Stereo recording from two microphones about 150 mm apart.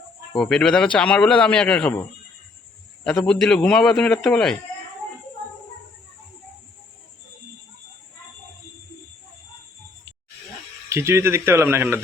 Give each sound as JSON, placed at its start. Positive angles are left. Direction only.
{"t": 0.3, "sound": "a man's voice", "side_deg": 5}
{"t": 10.8, "sound": "speech", "side_deg": -20}